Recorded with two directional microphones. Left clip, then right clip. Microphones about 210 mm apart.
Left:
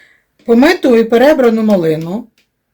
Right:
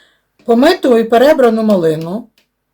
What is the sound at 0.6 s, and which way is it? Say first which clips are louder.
Speech: even; 25° left (ahead or behind).